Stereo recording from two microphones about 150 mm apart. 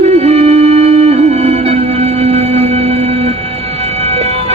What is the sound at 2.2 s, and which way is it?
Singing bowl, 45° right (ahead or behind).